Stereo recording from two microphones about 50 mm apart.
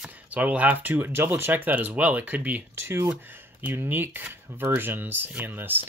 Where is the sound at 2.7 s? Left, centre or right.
Right.